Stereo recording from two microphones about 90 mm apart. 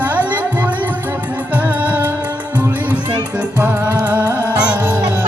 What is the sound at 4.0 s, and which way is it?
Music, 20° right (ahead or behind).